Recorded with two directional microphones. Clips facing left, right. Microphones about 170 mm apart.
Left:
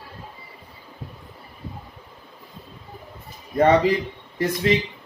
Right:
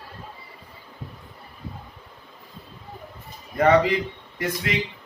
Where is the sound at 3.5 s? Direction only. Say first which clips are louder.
Left 1 dB; 30° left (ahead or behind).